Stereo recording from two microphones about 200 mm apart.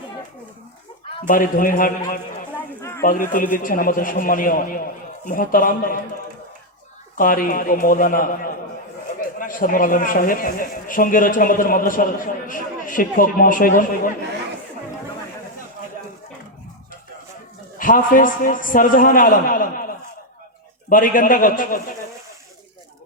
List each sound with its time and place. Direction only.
1.3 s a man's voice: 45° left (ahead or behind)
2.6 s a sound: 15° left (ahead or behind)
3.0 s a man's voice: 45° left (ahead or behind)
7.2 s a man's voice: 45° left (ahead or behind)
17.7 s a man's voice: 45° left (ahead or behind)
20.9 s a man's voice: 40° left (ahead or behind)